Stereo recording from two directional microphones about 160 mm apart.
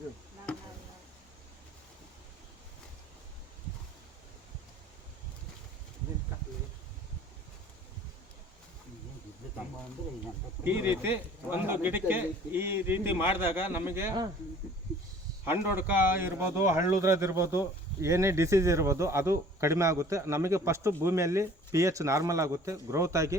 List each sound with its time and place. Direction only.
10.6 s speech: 15° right (ahead or behind)
15.9 s speech: 15° right (ahead or behind)